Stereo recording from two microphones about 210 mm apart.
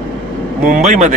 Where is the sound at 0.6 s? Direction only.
35° right (ahead or behind).